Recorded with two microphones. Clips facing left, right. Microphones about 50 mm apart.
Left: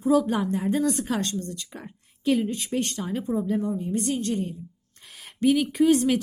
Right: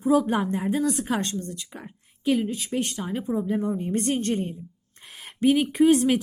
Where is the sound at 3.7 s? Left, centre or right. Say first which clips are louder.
Right 1 dB; right.